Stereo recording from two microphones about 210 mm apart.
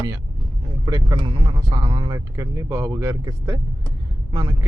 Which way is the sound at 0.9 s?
20° right (ahead or behind).